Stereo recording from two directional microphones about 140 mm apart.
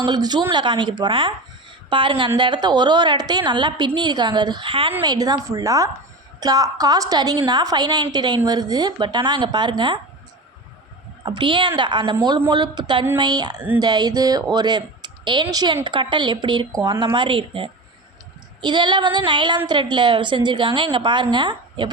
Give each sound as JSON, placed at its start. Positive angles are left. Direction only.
{"t": 0.0, "sound": "speech", "side_deg": -30}
{"t": 5.0, "sound": "speech", "side_deg": -25}
{"t": 11.3, "sound": "speech", "side_deg": -35}